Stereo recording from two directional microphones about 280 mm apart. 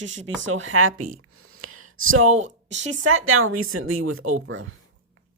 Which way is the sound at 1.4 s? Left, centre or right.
Right.